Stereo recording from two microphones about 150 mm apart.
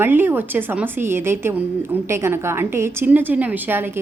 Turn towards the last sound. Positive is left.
turn(degrees=-10)  # may be behind; listen again after turning